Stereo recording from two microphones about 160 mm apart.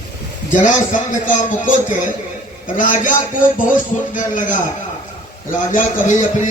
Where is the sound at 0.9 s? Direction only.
55° left (ahead or behind).